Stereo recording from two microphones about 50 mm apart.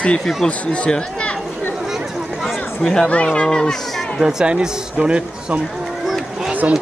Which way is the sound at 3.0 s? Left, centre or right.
Left.